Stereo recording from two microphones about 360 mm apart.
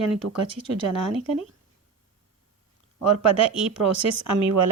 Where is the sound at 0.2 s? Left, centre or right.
Right.